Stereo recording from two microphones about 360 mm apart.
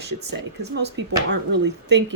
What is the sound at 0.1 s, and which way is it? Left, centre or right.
A woman's voice, right.